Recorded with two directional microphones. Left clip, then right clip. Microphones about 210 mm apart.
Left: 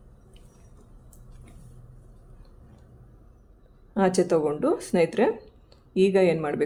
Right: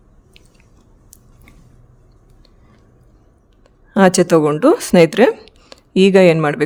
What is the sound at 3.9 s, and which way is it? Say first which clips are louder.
Speech: right 11 dB; 55° right (ahead or behind).